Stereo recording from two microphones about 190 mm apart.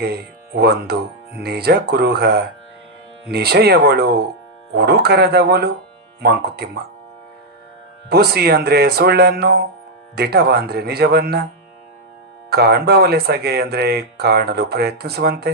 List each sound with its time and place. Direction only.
0.0 s speech: 55° right (ahead or behind)
8.1 s speech: 55° right (ahead or behind)
12.5 s speech: 55° right (ahead or behind)